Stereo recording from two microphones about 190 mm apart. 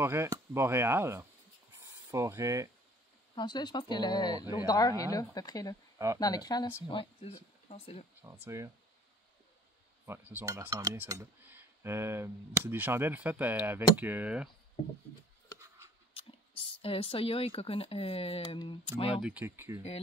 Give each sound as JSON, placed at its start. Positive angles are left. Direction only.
{"t": 0.0, "sound": "speech", "side_deg": -15}
{"t": 3.3, "sound": "speech", "side_deg": 25}
{"t": 8.5, "sound": "speech", "side_deg": -15}
{"t": 10.0, "sound": "speech", "side_deg": -10}
{"t": 16.2, "sound": "whispering", "side_deg": 30}
{"t": 16.8, "sound": "speech", "side_deg": 30}
{"t": 19.1, "sound": "speech", "side_deg": -5}